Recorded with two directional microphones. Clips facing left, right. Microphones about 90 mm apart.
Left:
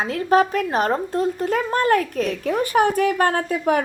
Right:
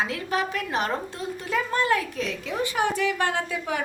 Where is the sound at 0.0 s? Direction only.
40° left (ahead or behind).